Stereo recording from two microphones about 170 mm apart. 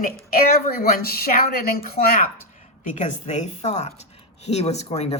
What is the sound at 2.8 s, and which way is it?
A woman's voice, 45° left (ahead or behind).